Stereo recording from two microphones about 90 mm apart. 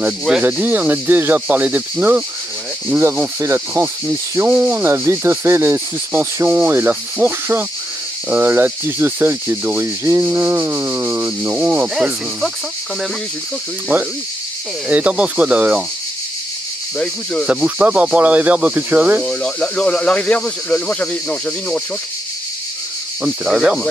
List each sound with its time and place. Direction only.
0.4 s insect: 20° right (ahead or behind)
3.3 s insect: 30° right (ahead or behind)
11.9 s speech: 5° right (ahead or behind)
14.9 s speech: 15° right (ahead or behind)
17.0 s speech: 10° left (ahead or behind)
17.6 s speech: 15° right (ahead or behind)
19.2 s speech: 10° left (ahead or behind)
23.2 s speech: 10° right (ahead or behind)